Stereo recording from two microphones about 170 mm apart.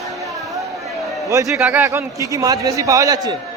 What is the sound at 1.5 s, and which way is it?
A man's voice, 5° right (ahead or behind).